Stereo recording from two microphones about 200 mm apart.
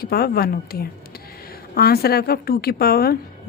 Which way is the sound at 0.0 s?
50° left (ahead or behind).